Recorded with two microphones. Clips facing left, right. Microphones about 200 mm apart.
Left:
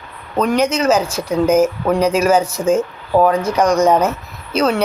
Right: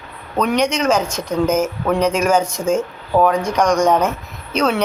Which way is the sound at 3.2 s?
Centre (ahead or behind).